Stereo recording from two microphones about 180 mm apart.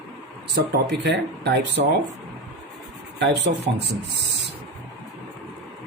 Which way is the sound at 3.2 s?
75° right (ahead or behind).